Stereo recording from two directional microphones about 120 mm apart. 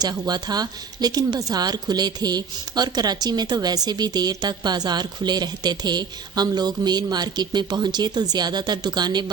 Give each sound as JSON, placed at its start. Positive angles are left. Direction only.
{"t": 0.0, "sound": "a woman's voice", "side_deg": -35}